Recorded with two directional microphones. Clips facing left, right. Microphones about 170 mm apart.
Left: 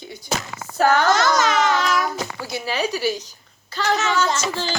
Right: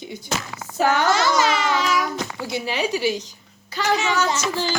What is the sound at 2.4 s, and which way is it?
A woman's voice, 20° right (ahead or behind).